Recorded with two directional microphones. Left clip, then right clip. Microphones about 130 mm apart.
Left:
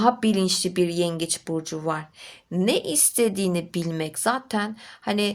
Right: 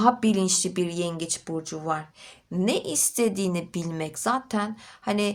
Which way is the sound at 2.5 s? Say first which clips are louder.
Left 3 dB; 25° left (ahead or behind).